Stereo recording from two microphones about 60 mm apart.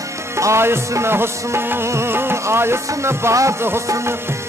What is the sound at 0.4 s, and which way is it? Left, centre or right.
Music, right.